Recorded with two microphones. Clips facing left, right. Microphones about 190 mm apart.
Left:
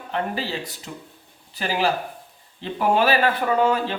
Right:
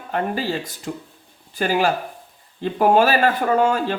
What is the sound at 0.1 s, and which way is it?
Speech, 50° right (ahead or behind).